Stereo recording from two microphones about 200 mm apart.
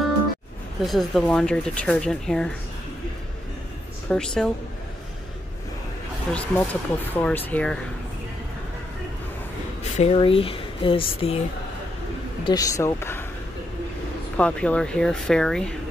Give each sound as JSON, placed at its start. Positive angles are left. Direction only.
{"t": 0.8, "sound": "speech", "side_deg": 0}
{"t": 4.1, "sound": "speech", "side_deg": 5}
{"t": 6.3, "sound": "speech", "side_deg": 10}
{"t": 9.9, "sound": "speech", "side_deg": 30}
{"t": 12.4, "sound": "speech", "side_deg": 15}
{"t": 14.3, "sound": "speech", "side_deg": 5}